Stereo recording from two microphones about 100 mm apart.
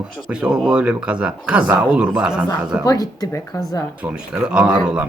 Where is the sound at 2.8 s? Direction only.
40° left (ahead or behind).